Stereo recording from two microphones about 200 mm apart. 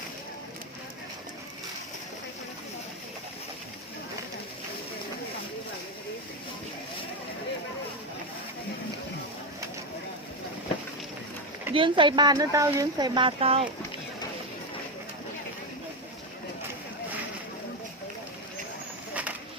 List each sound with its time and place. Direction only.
11.7 s speech: 25° right (ahead or behind)